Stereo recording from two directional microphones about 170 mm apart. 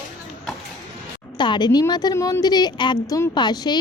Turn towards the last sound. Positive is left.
turn(degrees=25)  # may be behind; listen again after turning